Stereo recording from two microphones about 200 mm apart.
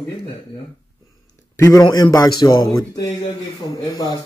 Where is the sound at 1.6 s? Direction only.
15° left (ahead or behind).